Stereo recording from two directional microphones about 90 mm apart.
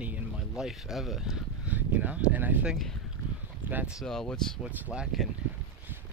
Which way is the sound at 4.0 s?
5° left (ahead or behind).